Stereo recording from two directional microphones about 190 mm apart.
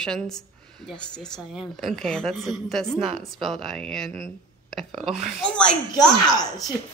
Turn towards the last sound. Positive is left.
turn(degrees=20)  # may be behind; listen again after turning